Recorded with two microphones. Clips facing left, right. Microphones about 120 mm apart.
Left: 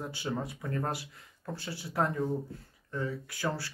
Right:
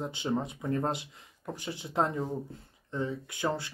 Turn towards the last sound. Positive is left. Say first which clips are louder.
# right 2 dB
turn(degrees=-20)  # may be behind; listen again after turning